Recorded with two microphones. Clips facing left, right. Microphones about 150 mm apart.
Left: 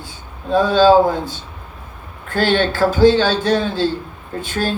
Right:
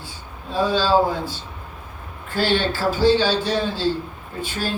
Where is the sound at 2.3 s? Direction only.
55° left (ahead or behind).